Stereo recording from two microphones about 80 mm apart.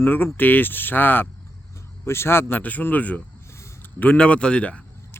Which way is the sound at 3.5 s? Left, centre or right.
Left.